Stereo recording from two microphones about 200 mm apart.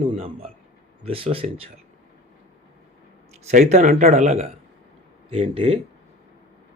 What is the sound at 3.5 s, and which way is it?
A man's voice, 35° right (ahead or behind).